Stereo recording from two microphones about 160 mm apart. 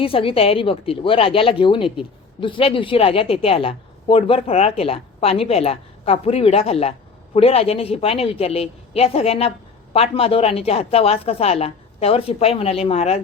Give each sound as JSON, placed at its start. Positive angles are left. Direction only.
{"t": 0.0, "sound": "a woman's voice", "side_deg": 35}